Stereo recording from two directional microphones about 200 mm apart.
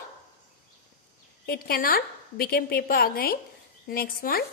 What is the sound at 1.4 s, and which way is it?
A woman's voice, 50° left (ahead or behind).